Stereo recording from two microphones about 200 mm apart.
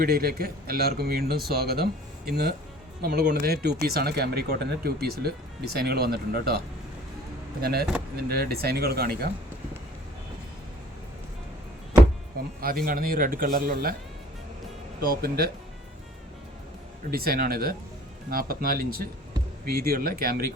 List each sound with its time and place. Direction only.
0.0 s speech: 50° right (ahead or behind)
7.6 s speech: 50° right (ahead or behind)
12.5 s speech: 50° right (ahead or behind)
15.0 s speech: 50° right (ahead or behind)
17.1 s speech: 45° right (ahead or behind)